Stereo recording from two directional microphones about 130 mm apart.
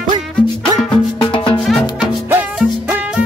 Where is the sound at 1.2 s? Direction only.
35° left (ahead or behind).